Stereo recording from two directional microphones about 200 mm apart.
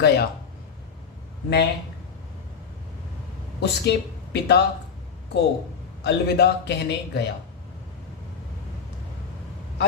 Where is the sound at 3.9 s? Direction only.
55° left (ahead or behind).